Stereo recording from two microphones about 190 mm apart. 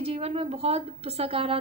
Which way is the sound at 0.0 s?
30° right (ahead or behind).